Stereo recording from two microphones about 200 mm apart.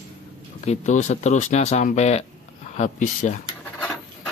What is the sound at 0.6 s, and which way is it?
Speech, 35° left (ahead or behind).